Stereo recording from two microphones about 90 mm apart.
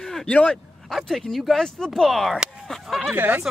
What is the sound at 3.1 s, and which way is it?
Speech, 20° right (ahead or behind).